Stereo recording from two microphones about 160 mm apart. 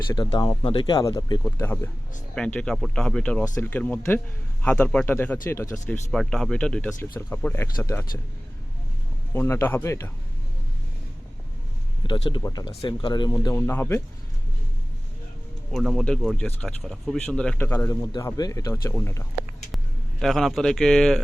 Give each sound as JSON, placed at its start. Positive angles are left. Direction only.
{"t": 0.1, "sound": "speech", "side_deg": 30}
{"t": 1.5, "sound": "speech", "side_deg": 15}
{"t": 3.4, "sound": "speech", "side_deg": 15}
{"t": 6.1, "sound": "speech", "side_deg": 5}
{"t": 9.3, "sound": "speech", "side_deg": 15}
{"t": 12.0, "sound": "speech", "side_deg": 30}
{"t": 15.7, "sound": "speech", "side_deg": 0}
{"t": 19.7, "sound": "speech", "side_deg": 0}